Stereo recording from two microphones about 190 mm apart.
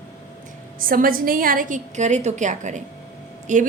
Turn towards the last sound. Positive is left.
turn(degrees=-40)  # may be behind; listen again after turning